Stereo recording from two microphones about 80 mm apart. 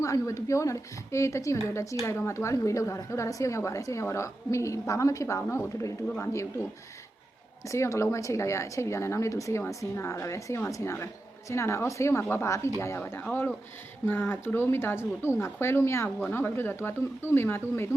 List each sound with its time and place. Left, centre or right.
0.0 s speech: left
7.7 s speech: left
13.0 s speech: left